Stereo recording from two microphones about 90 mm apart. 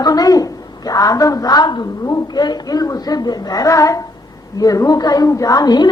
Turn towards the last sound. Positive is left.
turn(degrees=50)  # may be behind; listen again after turning